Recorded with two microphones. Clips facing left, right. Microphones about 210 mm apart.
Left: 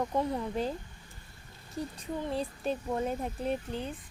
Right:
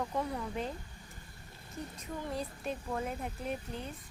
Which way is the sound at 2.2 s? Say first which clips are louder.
Left 5 dB; 30° left (ahead or behind).